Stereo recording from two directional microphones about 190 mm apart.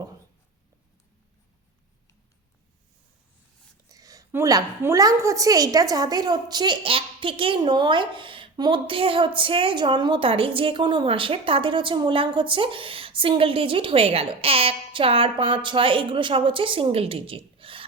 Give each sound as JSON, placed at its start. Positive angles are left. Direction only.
{"t": 3.8, "sound": "a woman's voice", "side_deg": -20}